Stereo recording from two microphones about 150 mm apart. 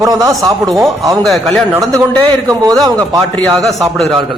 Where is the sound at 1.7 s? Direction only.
20° right (ahead or behind).